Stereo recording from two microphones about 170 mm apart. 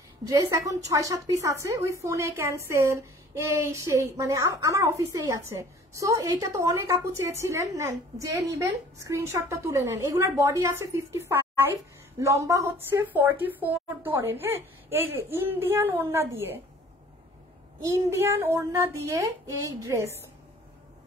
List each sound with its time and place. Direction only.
0.3 s a woman's voice: 20° right (ahead or behind)
17.8 s a woman's voice: 15° right (ahead or behind)